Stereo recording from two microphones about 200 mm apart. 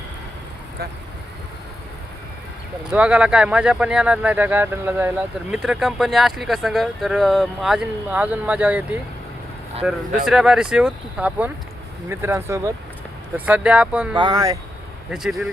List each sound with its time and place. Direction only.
2.9 s speech: 5° right (ahead or behind)
14.2 s speech: 20° right (ahead or behind)
15.1 s speech: centre (ahead or behind)